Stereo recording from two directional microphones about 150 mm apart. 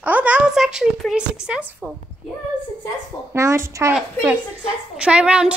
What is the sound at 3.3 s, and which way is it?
Speech, 20° right (ahead or behind).